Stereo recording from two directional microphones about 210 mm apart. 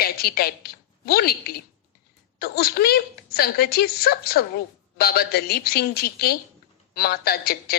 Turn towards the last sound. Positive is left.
turn(degrees=45)  # may be behind; listen again after turning